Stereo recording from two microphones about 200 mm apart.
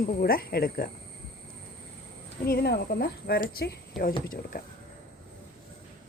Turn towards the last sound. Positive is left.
turn(degrees=45)  # may be behind; listen again after turning